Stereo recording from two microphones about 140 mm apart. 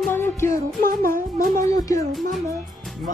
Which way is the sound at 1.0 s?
80° right.